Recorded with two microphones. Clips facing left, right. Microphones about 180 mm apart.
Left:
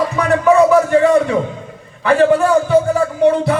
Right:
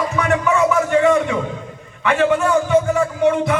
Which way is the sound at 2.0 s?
35° left (ahead or behind).